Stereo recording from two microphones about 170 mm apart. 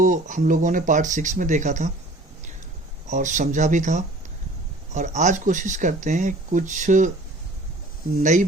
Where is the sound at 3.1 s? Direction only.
45° right (ahead or behind).